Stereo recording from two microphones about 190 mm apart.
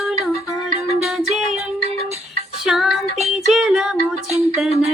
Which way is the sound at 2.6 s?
5° right (ahead or behind).